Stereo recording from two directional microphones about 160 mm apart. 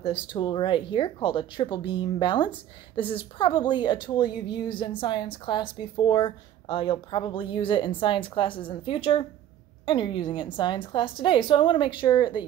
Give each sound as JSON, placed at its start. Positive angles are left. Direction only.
{"t": 0.0, "sound": "a woman's voice", "side_deg": 30}